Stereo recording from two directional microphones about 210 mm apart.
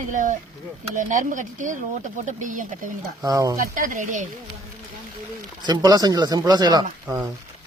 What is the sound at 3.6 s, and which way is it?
Speech, 40° right (ahead or behind).